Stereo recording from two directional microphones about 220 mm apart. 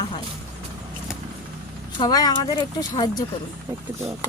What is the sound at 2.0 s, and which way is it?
Speech, 15° left (ahead or behind).